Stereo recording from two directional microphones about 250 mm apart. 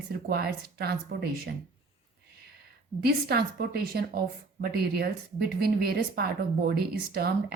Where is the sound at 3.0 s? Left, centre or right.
Right.